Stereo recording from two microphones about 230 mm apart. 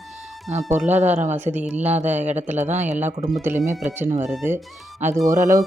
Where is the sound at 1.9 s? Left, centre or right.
Right.